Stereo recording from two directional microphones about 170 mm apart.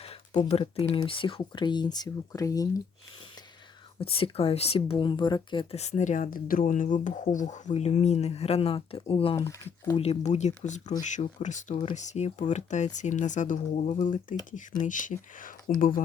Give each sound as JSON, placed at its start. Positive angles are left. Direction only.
{"t": 0.0, "sound": "speech", "side_deg": 35}
{"t": 4.0, "sound": "speech", "side_deg": 35}
{"t": 5.7, "sound": "speech", "side_deg": 40}
{"t": 9.5, "sound": "speech", "side_deg": 20}
{"t": 10.0, "sound": "speech", "side_deg": 40}